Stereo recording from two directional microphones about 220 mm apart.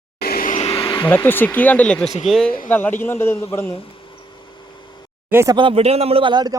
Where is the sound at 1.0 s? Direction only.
10° left (ahead or behind).